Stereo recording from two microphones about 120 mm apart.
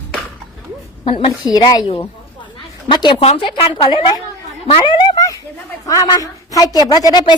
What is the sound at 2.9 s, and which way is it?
Speech, 40° left (ahead or behind).